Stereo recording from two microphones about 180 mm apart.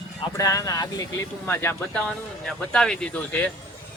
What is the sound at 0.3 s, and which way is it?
Speech, 20° left (ahead or behind).